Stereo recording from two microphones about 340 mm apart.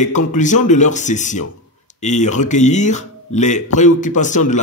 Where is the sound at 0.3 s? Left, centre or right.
Left.